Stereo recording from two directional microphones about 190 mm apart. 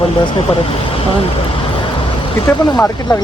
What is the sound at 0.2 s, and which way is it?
Speech, 25° left (ahead or behind).